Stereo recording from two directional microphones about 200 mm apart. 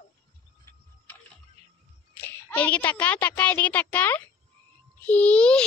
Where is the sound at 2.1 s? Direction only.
10° left (ahead or behind).